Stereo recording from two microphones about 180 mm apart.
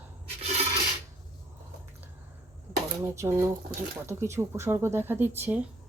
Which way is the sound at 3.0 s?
15° right (ahead or behind).